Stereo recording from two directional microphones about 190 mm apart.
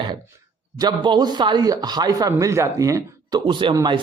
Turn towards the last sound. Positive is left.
turn(degrees=-20)  # may be behind; listen again after turning